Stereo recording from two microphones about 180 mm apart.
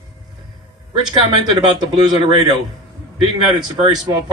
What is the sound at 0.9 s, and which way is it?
Speech, 25° right (ahead or behind).